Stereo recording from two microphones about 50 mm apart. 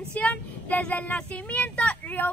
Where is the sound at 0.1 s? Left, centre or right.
Left.